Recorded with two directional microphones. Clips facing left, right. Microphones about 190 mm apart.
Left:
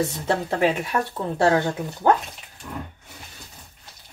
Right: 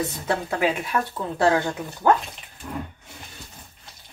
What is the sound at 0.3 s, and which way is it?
A woman's voice, 30° left (ahead or behind).